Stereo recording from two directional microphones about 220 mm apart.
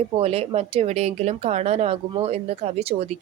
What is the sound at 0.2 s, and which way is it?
A woman's voice, 25° right (ahead or behind).